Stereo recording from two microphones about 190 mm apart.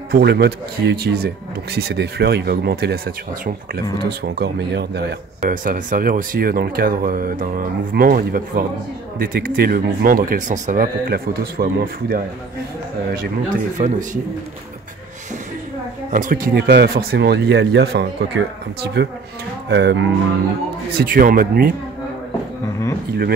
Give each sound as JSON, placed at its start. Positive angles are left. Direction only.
{"t": 0.1, "sound": "speech", "side_deg": -60}
{"t": 13.7, "sound": "speech", "side_deg": -40}
{"t": 16.1, "sound": "speech", "side_deg": -45}
{"t": 21.0, "sound": "speech", "side_deg": -50}